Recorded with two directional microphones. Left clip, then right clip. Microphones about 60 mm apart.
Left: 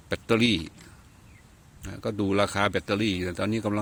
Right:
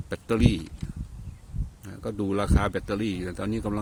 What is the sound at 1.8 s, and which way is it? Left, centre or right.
Speech, centre.